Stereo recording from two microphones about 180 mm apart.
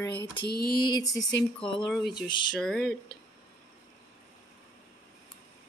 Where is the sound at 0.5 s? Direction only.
60° left (ahead or behind).